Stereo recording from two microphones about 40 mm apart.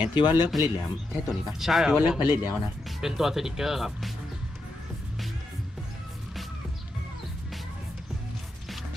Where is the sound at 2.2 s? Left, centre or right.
Right.